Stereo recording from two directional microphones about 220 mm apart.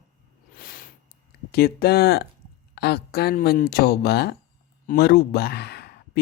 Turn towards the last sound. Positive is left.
turn(degrees=45)  # may be behind; listen again after turning